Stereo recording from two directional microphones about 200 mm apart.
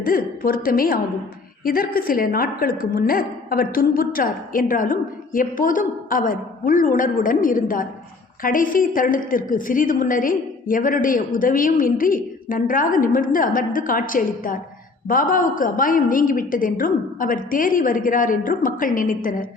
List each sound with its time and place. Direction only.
0.0 s a woman's voice: 45° left (ahead or behind)